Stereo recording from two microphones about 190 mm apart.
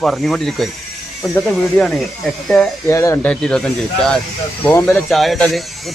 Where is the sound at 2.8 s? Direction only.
15° left (ahead or behind).